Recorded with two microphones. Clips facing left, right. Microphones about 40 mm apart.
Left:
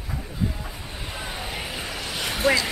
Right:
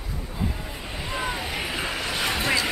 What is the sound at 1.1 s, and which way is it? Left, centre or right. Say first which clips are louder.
Vehicle: right 4 dB; centre.